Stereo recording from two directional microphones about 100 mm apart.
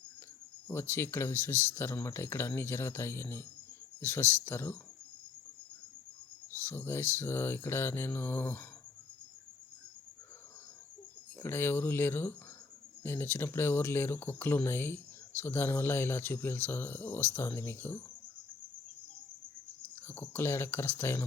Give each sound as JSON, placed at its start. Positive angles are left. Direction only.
{"t": 0.7, "sound": "speech", "side_deg": 25}
{"t": 6.7, "sound": "speech", "side_deg": 25}
{"t": 11.3, "sound": "speech", "side_deg": 20}
{"t": 20.0, "sound": "speech", "side_deg": 25}